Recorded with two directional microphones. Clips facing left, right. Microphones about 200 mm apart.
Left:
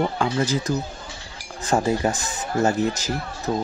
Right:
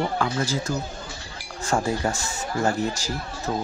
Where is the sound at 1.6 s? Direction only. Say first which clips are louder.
Left 3 dB; 20° left (ahead or behind).